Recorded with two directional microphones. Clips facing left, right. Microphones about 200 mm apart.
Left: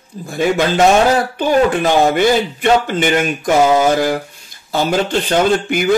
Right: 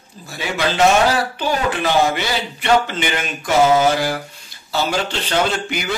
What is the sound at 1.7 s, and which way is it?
Speech, 50° left (ahead or behind).